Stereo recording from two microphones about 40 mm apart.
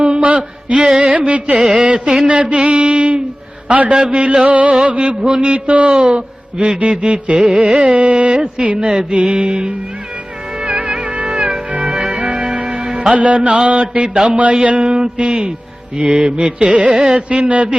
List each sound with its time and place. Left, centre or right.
0.0 s a sound: right
1.2 s a man's voice: right
7.9 s music: right
8.6 s a man's voice: right
10.6 s music: right
13.1 s a man's voice: right
16.9 s carnatic music: centre
17.2 s speech: right